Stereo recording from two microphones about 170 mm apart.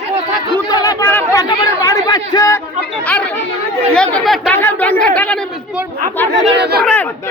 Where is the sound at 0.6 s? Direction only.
20° left (ahead or behind).